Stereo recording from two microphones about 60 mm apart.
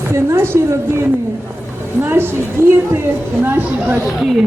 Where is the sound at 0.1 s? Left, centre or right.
Right.